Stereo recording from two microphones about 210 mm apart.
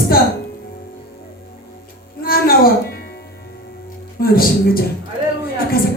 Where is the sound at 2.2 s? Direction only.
45° left (ahead or behind).